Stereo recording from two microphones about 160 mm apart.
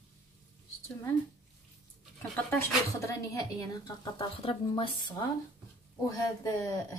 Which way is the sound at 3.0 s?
20° left (ahead or behind).